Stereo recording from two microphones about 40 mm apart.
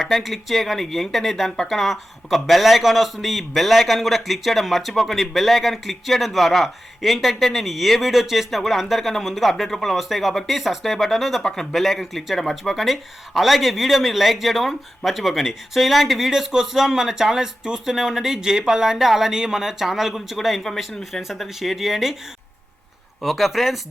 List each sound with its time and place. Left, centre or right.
0.2 s speech: centre
23.2 s speech: centre